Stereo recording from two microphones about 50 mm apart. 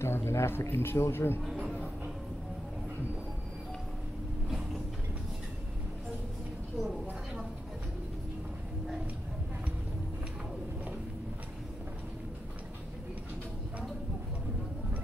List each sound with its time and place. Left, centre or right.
0.0 s a man's voice: left